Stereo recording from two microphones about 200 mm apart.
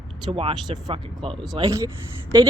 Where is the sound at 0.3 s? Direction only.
30° right (ahead or behind).